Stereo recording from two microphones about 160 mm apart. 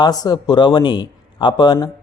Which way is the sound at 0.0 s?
25° left (ahead or behind).